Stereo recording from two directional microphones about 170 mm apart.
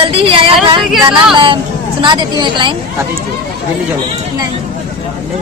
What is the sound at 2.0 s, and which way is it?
Speech, 25° right (ahead or behind).